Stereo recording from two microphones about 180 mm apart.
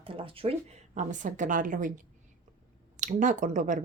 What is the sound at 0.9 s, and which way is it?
Speech, 45° right (ahead or behind).